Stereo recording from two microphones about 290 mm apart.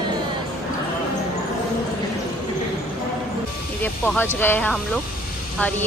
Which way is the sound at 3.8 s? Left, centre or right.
Centre.